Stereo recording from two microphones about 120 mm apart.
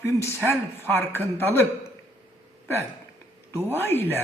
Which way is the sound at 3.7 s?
20° left (ahead or behind).